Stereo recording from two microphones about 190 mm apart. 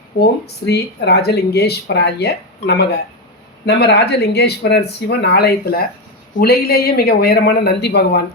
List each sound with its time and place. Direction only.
0.2 s speech: 60° left (ahead or behind)